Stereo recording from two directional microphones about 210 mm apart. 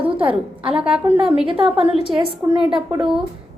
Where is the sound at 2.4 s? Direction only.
15° right (ahead or behind).